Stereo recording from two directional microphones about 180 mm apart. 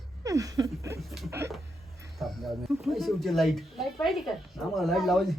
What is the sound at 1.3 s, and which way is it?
Speech, 15° right (ahead or behind).